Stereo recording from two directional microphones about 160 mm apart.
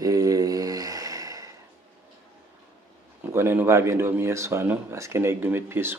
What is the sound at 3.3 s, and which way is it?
Speech, 15° right (ahead or behind).